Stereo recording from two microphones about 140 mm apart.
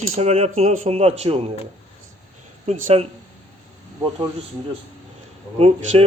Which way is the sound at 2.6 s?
50° right (ahead or behind).